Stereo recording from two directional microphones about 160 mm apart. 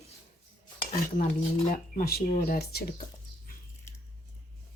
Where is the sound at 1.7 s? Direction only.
70° left (ahead or behind).